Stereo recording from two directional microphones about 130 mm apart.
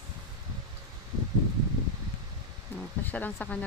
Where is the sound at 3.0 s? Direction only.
15° left (ahead or behind).